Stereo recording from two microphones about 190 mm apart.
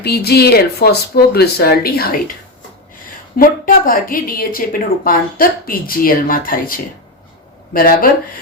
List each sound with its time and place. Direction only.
0.0 s speech: 55° left (ahead or behind)
3.3 s a woman's voice: 50° left (ahead or behind)